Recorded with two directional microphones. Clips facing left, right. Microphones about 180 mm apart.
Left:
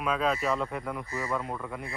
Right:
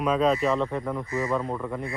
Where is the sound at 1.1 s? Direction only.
20° right (ahead or behind).